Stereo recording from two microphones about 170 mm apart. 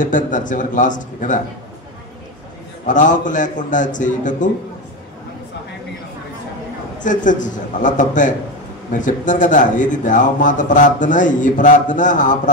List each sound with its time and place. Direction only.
0.0 s speech: 50° left (ahead or behind)
2.9 s speech: 50° left (ahead or behind)
7.0 s speech: 50° left (ahead or behind)